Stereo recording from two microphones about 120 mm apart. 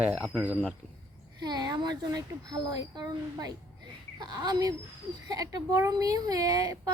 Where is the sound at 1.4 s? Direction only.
35° right (ahead or behind).